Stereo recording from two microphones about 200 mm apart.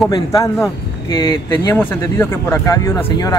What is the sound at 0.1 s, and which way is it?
Speech, 15° left (ahead or behind).